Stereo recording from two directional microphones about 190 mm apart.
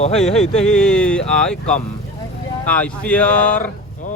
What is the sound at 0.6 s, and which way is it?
Speech, 5° left (ahead or behind).